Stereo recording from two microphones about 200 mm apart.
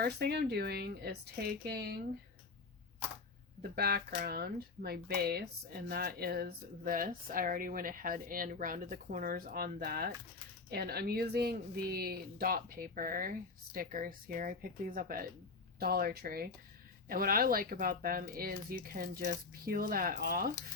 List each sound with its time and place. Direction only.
0.0 s speech: 55° right (ahead or behind)
3.6 s speech: 50° right (ahead or behind)